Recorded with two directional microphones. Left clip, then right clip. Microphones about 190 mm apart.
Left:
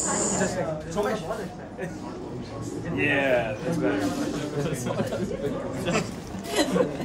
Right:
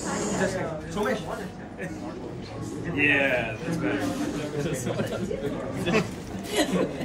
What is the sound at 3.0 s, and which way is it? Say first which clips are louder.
Speech: right 1 dB; 50° left (ahead or behind).